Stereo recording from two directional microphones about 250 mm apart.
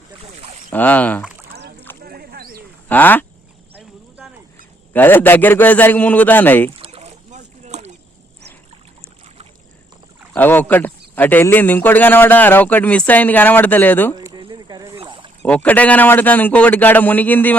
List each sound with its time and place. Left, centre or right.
0.7 s speech: centre
2.0 s a sound: right
2.9 s speech: centre
4.9 s speech: centre
6.7 s rowboat: right
10.3 s speech: centre
14.2 s dog: centre
15.4 s speech: centre